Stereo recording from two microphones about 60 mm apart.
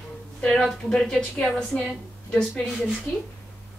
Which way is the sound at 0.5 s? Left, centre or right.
Centre.